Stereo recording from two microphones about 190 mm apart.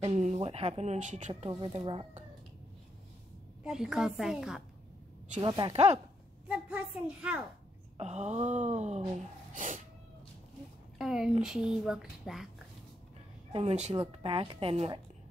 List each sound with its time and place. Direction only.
0.0 s speech: 35° right (ahead or behind)
3.6 s speech: 5° right (ahead or behind)
5.4 s a woman's voice: 25° right (ahead or behind)
6.4 s a woman's voice: 5° right (ahead or behind)
8.0 s speech: 35° right (ahead or behind)
11.0 s speech: centre (ahead or behind)
13.5 s a woman's voice: 30° right (ahead or behind)